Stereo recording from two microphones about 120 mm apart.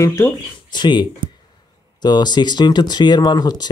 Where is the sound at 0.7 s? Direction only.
40° left (ahead or behind).